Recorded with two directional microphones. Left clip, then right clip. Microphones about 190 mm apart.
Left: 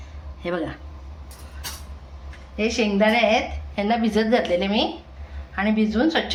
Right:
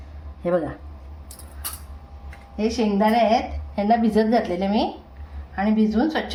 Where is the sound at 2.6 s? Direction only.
20° right (ahead or behind).